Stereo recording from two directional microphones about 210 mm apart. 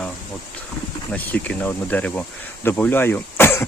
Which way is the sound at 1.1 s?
10° left (ahead or behind).